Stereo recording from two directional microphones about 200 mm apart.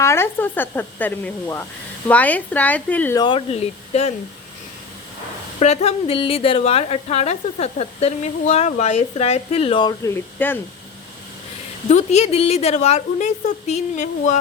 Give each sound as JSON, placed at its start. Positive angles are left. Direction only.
{"t": 0.0, "sound": "speech", "side_deg": 15}
{"t": 3.2, "sound": "a woman's voice", "side_deg": 25}
{"t": 5.5, "sound": "a woman's voice", "side_deg": 30}
{"t": 10.3, "sound": "speech", "side_deg": 10}
{"t": 11.9, "sound": "a woman's voice", "side_deg": 35}